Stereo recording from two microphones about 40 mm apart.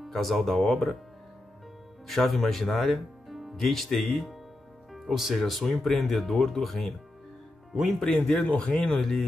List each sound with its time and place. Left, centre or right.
0.0 s speech: centre
2.0 s speech: centre
8.4 s speech: left